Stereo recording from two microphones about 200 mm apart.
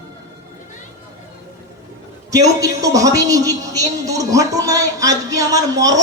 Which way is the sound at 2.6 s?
15° right (ahead or behind).